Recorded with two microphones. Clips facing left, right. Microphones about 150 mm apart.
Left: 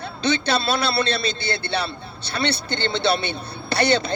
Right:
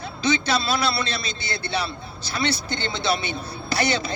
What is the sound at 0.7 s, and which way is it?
Speech, 30° left (ahead or behind).